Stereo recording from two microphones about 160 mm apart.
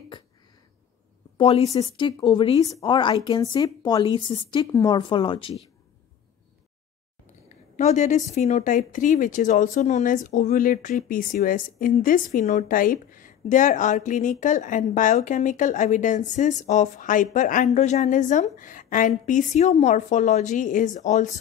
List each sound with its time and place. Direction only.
1.4 s speech: 40° left (ahead or behind)
7.4 s a sound: 50° left (ahead or behind)
8.3 s speech: 45° left (ahead or behind)